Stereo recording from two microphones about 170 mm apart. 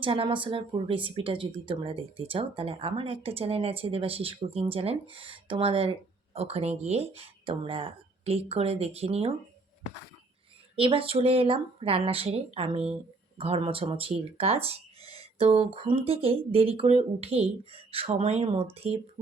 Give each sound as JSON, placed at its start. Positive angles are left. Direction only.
{"t": 0.0, "sound": "speech", "side_deg": -30}
{"t": 10.8, "sound": "speech", "side_deg": -30}